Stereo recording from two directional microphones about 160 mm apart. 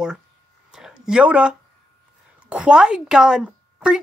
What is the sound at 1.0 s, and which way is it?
A woman's voice, 5° right (ahead or behind).